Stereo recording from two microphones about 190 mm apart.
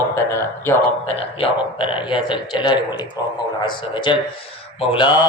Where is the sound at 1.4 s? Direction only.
30° left (ahead or behind).